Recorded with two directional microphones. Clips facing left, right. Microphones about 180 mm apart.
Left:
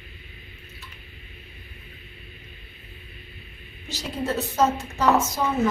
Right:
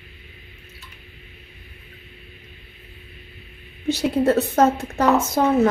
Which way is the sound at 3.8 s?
60° right (ahead or behind).